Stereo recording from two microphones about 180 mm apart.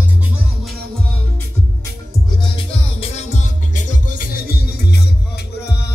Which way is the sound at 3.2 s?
40° left (ahead or behind).